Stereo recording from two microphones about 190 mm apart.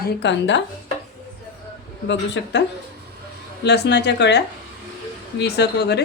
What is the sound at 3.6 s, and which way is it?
Speech, 60° left (ahead or behind).